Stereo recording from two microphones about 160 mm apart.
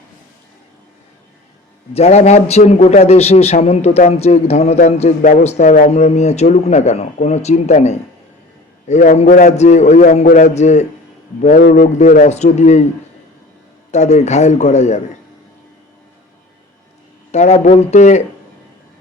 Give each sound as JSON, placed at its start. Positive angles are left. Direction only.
{"t": 1.9, "sound": "a man's voice", "side_deg": 40}
{"t": 11.4, "sound": "a man's voice", "side_deg": 60}
{"t": 13.9, "sound": "a man's voice", "side_deg": 45}
{"t": 17.3, "sound": "a man's voice", "side_deg": 45}